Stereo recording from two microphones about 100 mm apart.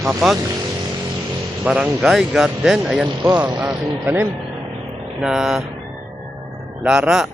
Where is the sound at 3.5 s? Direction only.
20° right (ahead or behind).